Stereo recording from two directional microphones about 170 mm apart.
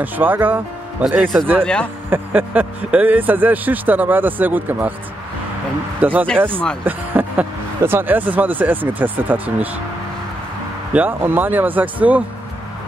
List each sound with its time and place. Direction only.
0.0 s speech: 10° right (ahead or behind)
1.6 s speech: 5° left (ahead or behind)
2.0 s speech: 10° right (ahead or behind)
5.9 s speech: 10° right (ahead or behind)
10.9 s speech: 10° right (ahead or behind)